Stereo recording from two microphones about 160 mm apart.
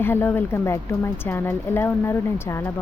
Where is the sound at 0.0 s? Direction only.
15° left (ahead or behind).